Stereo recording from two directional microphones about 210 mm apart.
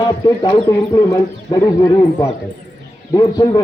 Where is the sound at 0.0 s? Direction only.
20° left (ahead or behind).